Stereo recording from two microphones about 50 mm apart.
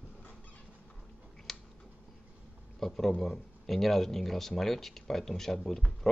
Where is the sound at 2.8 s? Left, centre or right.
Centre.